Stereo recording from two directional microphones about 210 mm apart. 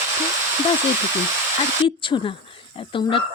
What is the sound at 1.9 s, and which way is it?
Speech, 25° left (ahead or behind).